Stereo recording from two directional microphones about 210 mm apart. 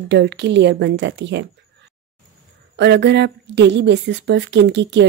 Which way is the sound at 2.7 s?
55° right (ahead or behind).